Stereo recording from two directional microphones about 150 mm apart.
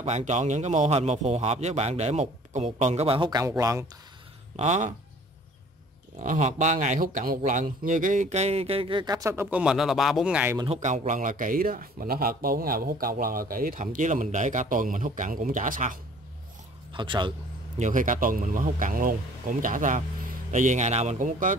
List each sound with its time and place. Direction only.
0.0 s speech: 50° right (ahead or behind); by 3.8 s 20° right (ahead or behind)
4.6 s speech: 50° right (ahead or behind)
6.1 s speech: 55° right (ahead or behind); by 10.6 s 10° right (ahead or behind)
10.7 s speech: 55° right (ahead or behind)
16.9 s a man's voice: 30° right (ahead or behind)
17.7 s speech: 55° right (ahead or behind)